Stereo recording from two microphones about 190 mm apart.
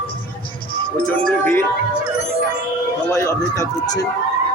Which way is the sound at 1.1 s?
10° left (ahead or behind).